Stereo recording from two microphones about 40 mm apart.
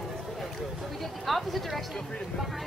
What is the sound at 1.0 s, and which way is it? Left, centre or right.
Speech, centre.